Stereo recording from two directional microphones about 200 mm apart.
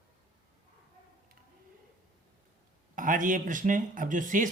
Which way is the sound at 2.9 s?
40° right (ahead or behind).